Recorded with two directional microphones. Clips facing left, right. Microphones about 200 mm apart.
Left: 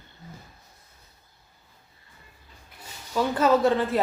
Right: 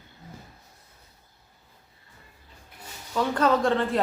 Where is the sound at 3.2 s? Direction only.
5° left (ahead or behind).